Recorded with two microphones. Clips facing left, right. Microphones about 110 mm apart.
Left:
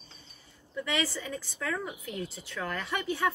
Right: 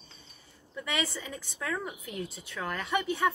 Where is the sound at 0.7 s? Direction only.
20° right (ahead or behind).